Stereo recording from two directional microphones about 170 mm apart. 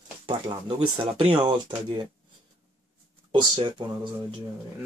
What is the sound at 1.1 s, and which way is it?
Speech, 35° right (ahead or behind).